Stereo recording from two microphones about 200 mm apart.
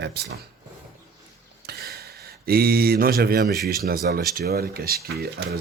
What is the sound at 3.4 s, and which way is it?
Speech, centre (ahead or behind).